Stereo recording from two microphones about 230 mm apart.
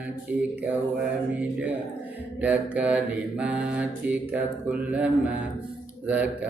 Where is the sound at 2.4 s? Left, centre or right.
Centre.